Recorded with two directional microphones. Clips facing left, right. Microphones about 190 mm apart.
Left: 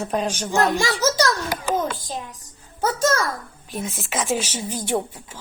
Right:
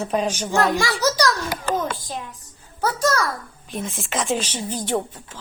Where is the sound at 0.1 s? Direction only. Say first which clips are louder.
Right 1 dB; 10° right (ahead or behind).